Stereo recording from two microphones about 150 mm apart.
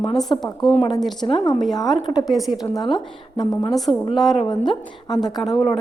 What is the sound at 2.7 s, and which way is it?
Speech, 30° left (ahead or behind).